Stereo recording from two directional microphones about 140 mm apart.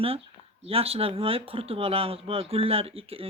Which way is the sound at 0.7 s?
45° right (ahead or behind).